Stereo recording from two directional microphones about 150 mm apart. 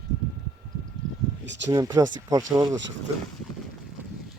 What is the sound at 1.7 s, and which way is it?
Speech, 20° right (ahead or behind).